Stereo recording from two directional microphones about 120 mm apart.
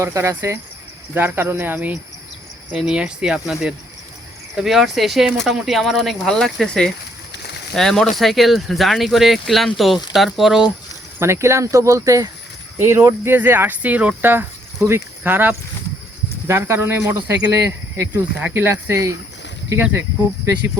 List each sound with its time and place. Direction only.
0.0 s speech: 25° right (ahead or behind); by 10.7 s 5° right (ahead or behind)
11.2 s speech: 25° right (ahead or behind)
17.5 s speech: 25° right (ahead or behind)
18.7 s speech: 25° right (ahead or behind)